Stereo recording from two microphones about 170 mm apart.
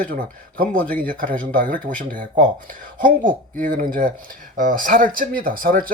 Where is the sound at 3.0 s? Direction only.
55° right (ahead or behind).